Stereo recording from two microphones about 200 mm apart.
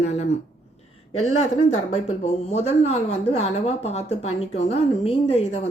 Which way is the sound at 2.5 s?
30° left (ahead or behind).